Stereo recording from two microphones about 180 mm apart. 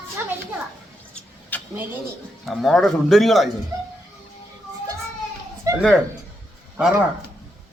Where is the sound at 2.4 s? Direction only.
Centre (ahead or behind).